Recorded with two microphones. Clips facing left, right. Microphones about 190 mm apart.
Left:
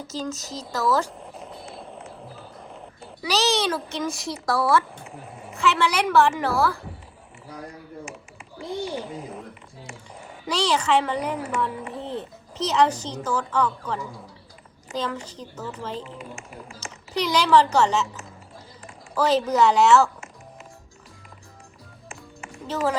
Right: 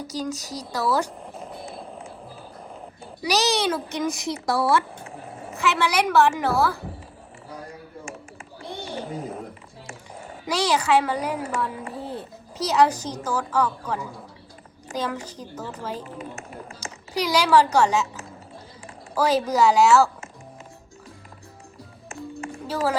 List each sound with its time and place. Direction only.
0.1 s a woman's voice: 15° right (ahead or behind)
1.7 s a sound: centre (ahead or behind)
3.2 s a woman's voice: 15° right (ahead or behind)
4.5 s a woman's voice: centre (ahead or behind)
10.4 s a woman's voice: 10° right (ahead or behind)
11.4 s music: centre (ahead or behind)
12.5 s a woman's voice: 10° right (ahead or behind)
17.2 s a woman's voice: 10° right (ahead or behind)
22.6 s speech: 5° right (ahead or behind)